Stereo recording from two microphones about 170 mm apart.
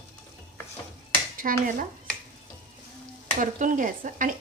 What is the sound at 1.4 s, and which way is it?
Speech, 50° right (ahead or behind).